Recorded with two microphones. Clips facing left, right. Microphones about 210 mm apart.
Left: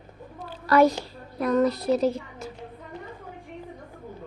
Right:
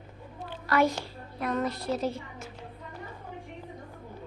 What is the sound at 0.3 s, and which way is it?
A woman's voice, 40° left (ahead or behind).